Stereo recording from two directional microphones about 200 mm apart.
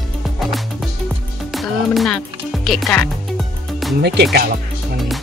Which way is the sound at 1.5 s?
Centre (ahead or behind).